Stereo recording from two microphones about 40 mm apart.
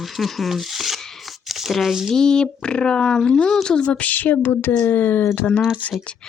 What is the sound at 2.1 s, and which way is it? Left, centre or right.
Speech, centre.